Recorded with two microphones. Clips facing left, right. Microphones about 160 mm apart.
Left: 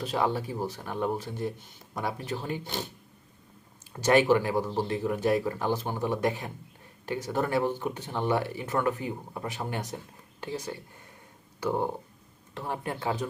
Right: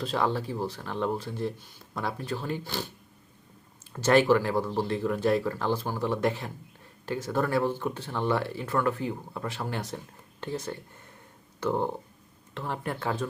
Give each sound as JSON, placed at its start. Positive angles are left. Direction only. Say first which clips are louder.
{"t": 0.0, "sound": "speech", "louder": "even", "side_deg": 15}
{"t": 3.9, "sound": "speech", "louder": "right 1 dB", "side_deg": 15}